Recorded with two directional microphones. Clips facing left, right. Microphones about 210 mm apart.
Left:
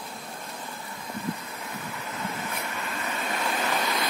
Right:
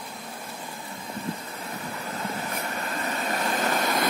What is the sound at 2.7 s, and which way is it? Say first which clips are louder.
Vehicle: right 3 dB; 40° right (ahead or behind).